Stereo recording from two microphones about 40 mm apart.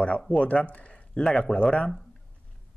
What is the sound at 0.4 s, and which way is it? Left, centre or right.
Speech, left.